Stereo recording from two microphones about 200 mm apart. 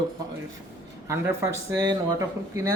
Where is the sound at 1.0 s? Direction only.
15° right (ahead or behind).